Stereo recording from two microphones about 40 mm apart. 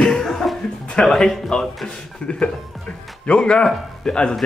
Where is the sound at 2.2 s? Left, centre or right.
Left.